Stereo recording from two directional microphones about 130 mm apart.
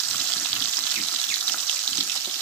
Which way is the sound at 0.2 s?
10° left (ahead or behind).